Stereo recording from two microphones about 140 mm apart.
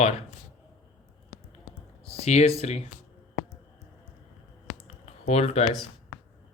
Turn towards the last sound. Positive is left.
turn(degrees=50)  # may be behind; listen again after turning